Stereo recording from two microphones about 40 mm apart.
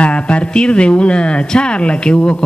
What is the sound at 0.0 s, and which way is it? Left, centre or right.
Speech, left.